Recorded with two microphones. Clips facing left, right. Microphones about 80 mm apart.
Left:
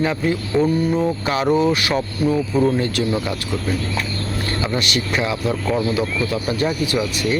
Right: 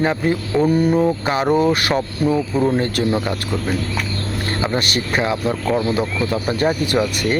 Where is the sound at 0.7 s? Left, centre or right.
Right.